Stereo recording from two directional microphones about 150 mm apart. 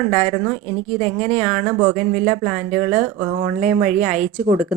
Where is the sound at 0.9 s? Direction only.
45° right (ahead or behind).